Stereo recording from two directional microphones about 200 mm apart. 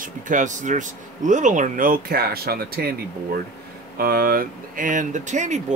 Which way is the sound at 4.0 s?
50° right (ahead or behind).